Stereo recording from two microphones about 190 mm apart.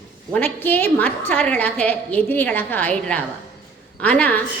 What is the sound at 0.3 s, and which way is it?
A woman's voice, 10° left (ahead or behind).